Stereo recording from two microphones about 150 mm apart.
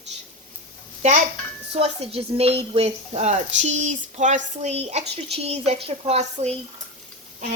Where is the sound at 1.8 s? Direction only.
40° right (ahead or behind).